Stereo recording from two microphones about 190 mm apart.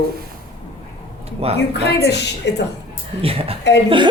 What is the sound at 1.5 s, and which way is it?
Speech, 65° left (ahead or behind).